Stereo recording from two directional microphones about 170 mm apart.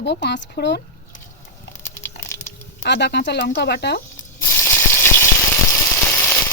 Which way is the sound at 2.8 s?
80° left.